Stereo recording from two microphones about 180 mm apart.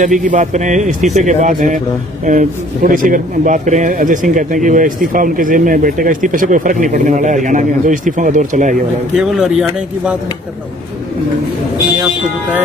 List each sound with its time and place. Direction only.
0.0 s speech: 45° right (ahead or behind)
9.1 s a man's voice: 5° right (ahead or behind)